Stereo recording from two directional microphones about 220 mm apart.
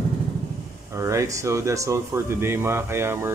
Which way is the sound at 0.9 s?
15° right (ahead or behind).